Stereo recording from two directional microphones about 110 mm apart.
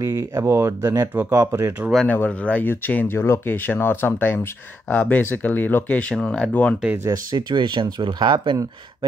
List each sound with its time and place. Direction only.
0.0 s speech: 30° right (ahead or behind)
2.0 s speech: 15° left (ahead or behind)
7.1 s speech: 40° right (ahead or behind)